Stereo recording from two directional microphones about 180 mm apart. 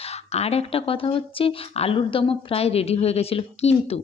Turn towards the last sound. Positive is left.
turn(degrees=35)  # may be behind; listen again after turning